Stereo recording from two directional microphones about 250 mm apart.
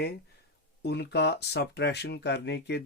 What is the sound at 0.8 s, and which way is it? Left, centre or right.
Speech, left.